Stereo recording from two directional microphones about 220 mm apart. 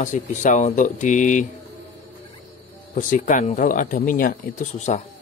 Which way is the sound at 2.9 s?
35° left (ahead or behind).